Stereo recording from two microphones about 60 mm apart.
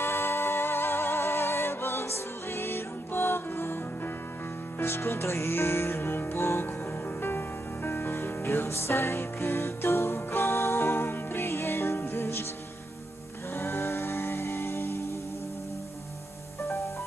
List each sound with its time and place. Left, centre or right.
0.0 s music: left
13.6 s music: left
16.6 s music: left